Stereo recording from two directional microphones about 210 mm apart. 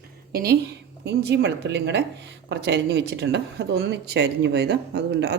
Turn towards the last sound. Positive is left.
turn(degrees=-55)  # may be behind; listen again after turning